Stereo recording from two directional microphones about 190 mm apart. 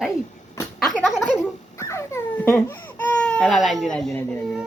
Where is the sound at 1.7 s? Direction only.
15° left (ahead or behind).